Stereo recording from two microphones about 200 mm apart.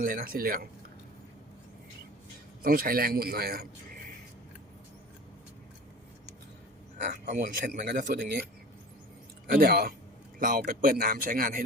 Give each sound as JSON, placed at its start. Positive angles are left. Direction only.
{"t": 0.0, "sound": "speech", "side_deg": -45}
{"t": 2.6, "sound": "speech", "side_deg": -45}
{"t": 7.0, "sound": "speech", "side_deg": -40}
{"t": 9.5, "sound": "speech", "side_deg": -50}